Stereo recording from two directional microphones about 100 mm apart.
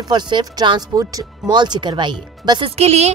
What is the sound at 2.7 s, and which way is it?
Speech, 90° right.